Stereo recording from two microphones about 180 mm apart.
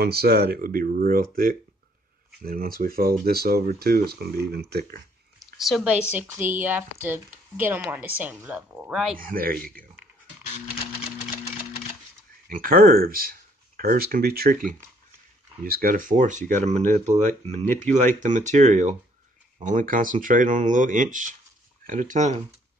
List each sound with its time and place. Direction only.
0.0 s speech: 60° right (ahead or behind)
5.4 s speech: centre (ahead or behind)
9.2 s speech: 55° right (ahead or behind)
12.4 s speech: 50° right (ahead or behind)